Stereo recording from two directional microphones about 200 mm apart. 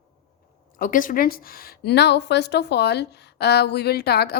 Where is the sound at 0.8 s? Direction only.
45° left (ahead or behind).